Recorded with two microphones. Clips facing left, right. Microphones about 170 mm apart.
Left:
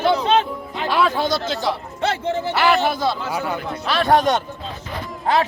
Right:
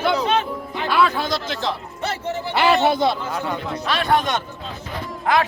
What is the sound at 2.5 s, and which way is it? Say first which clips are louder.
Speech: right 2 dB; 20° right (ahead or behind).